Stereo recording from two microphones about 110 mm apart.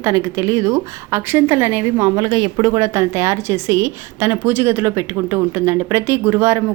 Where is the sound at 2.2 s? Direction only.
35° right (ahead or behind).